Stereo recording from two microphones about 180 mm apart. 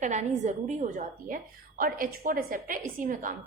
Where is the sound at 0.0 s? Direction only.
40° right (ahead or behind).